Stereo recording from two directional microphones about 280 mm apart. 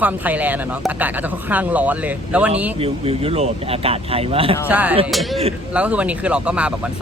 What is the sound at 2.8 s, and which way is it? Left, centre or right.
Speech, right.